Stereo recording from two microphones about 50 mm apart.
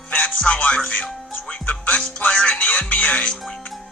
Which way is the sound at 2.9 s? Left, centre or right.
Left.